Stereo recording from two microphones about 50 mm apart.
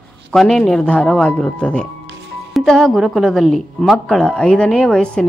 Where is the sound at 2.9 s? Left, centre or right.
Centre.